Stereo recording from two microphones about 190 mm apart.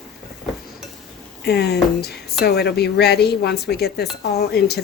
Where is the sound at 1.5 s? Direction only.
60° left (ahead or behind).